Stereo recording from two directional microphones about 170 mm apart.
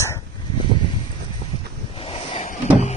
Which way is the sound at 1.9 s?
35° left (ahead or behind).